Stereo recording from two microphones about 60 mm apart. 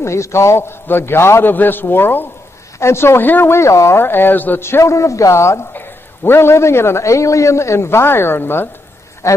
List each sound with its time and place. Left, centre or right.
0.0 s a man's voice: left
2.8 s a man's voice: left
3.2 s a man's voice: left
4.0 s a man's voice: left
4.6 s speech: left
5.7 s a man's voice: left
9.2 s speech: left